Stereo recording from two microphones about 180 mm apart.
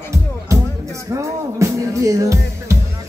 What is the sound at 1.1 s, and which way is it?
Music, 15° right (ahead or behind).